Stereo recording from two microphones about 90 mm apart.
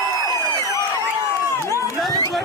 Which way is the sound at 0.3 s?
40° left (ahead or behind).